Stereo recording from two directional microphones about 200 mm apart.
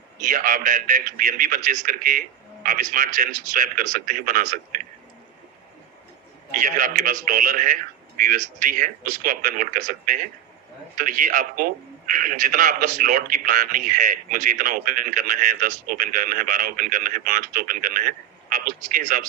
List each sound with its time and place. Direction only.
0.3 s a man's voice: 45° right (ahead or behind)
6.6 s a man's voice: 45° right (ahead or behind)